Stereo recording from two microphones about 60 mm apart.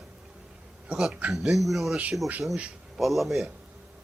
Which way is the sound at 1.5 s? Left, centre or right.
Centre.